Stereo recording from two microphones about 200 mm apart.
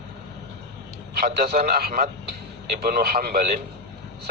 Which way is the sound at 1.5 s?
40° right (ahead or behind).